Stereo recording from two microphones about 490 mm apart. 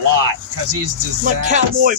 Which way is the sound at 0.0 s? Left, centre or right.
Right.